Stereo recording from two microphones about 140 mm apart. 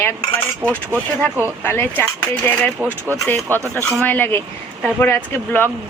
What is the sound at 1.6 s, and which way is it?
Speech, 15° left (ahead or behind).